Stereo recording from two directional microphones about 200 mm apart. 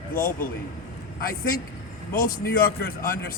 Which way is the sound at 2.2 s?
50° left (ahead or behind).